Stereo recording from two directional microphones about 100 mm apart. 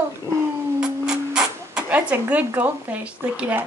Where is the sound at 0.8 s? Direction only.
10° right (ahead or behind).